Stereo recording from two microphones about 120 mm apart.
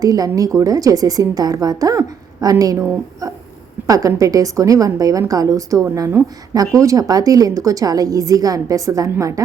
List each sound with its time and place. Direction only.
0.0 s a woman's voice: 30° right (ahead or behind)
3.8 s a woman's voice: 30° right (ahead or behind)